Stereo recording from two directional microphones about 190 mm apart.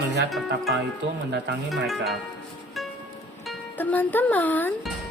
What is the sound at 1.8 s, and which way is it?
Speech, centre (ahead or behind).